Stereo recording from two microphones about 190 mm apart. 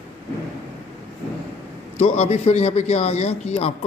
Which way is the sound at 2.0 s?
35° left (ahead or behind).